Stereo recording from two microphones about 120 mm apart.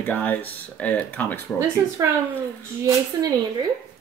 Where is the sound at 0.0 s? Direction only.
15° left (ahead or behind).